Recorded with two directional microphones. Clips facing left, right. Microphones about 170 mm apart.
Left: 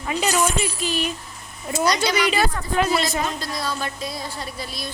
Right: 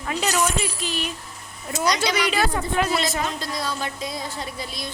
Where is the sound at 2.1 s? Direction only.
Centre (ahead or behind).